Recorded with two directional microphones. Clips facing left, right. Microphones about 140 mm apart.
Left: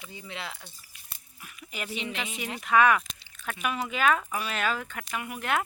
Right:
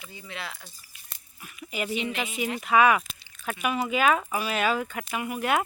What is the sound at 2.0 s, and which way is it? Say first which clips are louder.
Speech: right 5 dB; 5° right (ahead or behind).